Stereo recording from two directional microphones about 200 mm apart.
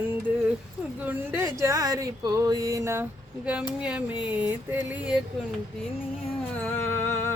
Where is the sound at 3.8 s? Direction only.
5° right (ahead or behind).